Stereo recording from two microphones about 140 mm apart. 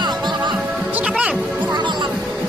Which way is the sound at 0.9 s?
10° right (ahead or behind).